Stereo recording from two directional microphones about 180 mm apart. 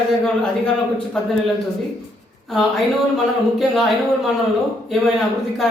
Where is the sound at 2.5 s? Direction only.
Centre (ahead or behind).